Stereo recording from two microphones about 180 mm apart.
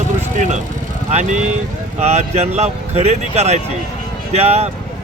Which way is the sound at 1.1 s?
40° right (ahead or behind).